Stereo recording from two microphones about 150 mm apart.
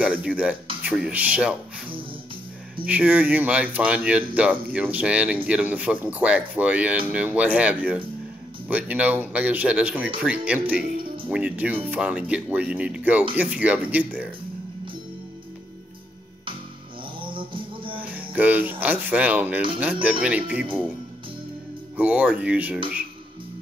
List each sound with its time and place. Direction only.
0.0 s speech: 5° right (ahead or behind)
2.8 s speech: 10° right (ahead or behind)
17.2 s music: 35° right (ahead or behind)
18.1 s speech: 10° right (ahead or behind)
21.9 s speech: 10° right (ahead or behind)